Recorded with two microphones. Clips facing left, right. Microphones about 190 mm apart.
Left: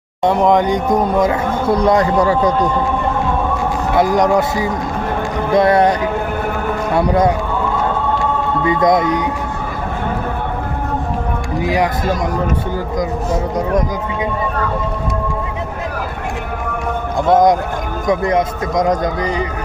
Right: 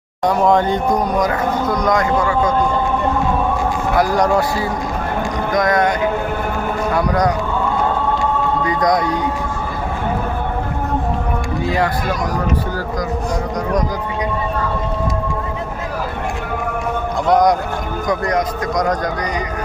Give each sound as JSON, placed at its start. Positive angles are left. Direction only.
{"t": 0.3, "sound": "speech", "side_deg": 20}
{"t": 3.9, "sound": "speech", "side_deg": 20}
{"t": 5.5, "sound": "music", "side_deg": 30}
{"t": 6.9, "sound": "speech", "side_deg": 25}
{"t": 8.6, "sound": "speech", "side_deg": 25}
{"t": 11.6, "sound": "speech", "side_deg": 15}
{"t": 17.2, "sound": "speech", "side_deg": 25}